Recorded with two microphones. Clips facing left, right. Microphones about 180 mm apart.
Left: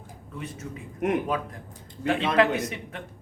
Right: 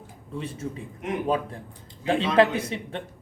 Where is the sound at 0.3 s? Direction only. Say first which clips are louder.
Right 5 dB; 30° right (ahead or behind).